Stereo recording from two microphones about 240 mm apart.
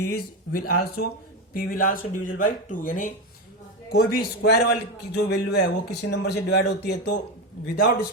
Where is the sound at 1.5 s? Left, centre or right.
Left.